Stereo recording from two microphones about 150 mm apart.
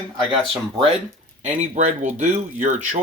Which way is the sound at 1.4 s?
50° right (ahead or behind).